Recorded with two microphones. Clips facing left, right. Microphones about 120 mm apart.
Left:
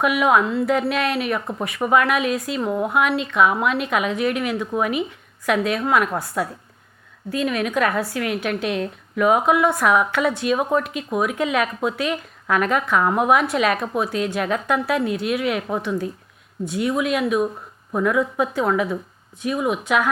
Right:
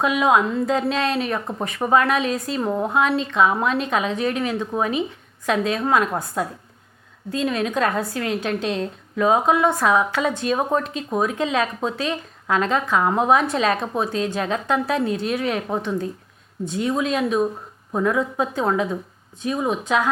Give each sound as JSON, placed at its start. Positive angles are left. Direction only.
{"t": 0.0, "sound": "a woman's voice", "side_deg": -25}